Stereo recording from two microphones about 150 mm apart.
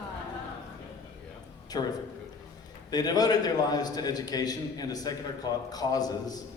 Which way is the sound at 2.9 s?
25° left (ahead or behind).